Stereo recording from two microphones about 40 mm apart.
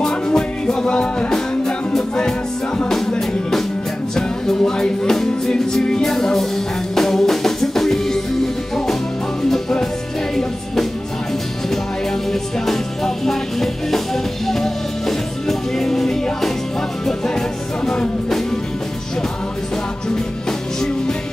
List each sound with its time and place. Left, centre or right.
0.0 s music: centre
3.2 s music: centre
9.5 s music: centre
12.3 s music: centre